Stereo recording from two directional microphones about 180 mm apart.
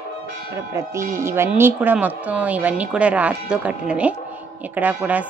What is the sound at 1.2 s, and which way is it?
Speech, 15° right (ahead or behind).